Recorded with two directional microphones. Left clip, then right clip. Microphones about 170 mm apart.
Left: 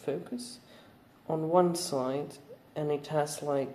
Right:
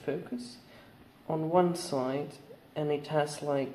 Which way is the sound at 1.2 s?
20° left (ahead or behind).